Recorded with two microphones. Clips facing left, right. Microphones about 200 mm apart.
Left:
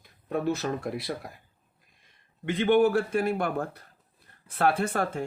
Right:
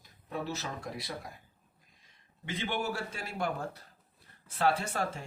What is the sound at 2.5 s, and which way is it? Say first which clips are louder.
Speech: left 13 dB; 60° left (ahead or behind).